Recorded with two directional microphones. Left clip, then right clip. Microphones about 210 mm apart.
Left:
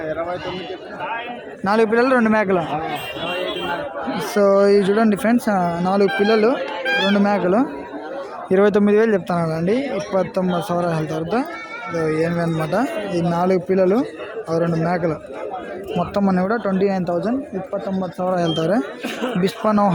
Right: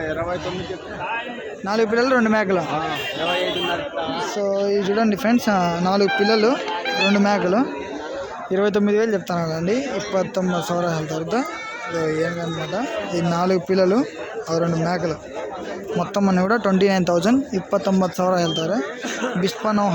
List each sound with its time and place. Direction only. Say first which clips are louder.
1.6 s speech: left 3 dB; 10° left (ahead or behind)
4.1 s speech: left 8 dB; 50° left (ahead or behind)
4.6 s speech: left 4 dB; 20° left (ahead or behind)
13.3 s speech: left 1 dB; 5° left (ahead or behind)
16.1 s speech: right 1 dB; 5° left (ahead or behind); by 18.1 s 15° right (ahead or behind)
18.2 s speech: left 4 dB; centre (ahead or behind)
18.8 s speech: left 1 dB; 30° left (ahead or behind)
19.4 s speech: left 4 dB; 10° left (ahead or behind)